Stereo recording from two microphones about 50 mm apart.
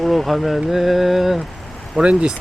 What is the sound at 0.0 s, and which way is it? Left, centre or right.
Speech, centre.